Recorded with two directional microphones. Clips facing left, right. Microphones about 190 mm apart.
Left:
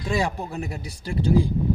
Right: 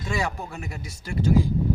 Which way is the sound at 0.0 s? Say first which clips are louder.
Left 3 dB; 30° left (ahead or behind).